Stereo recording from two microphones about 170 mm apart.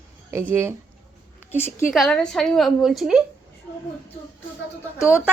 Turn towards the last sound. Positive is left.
turn(degrees=15)  # may be behind; listen again after turning